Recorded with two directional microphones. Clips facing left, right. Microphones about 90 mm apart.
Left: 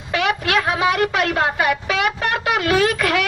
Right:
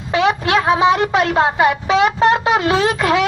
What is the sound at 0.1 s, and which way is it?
Speech, 25° right (ahead or behind).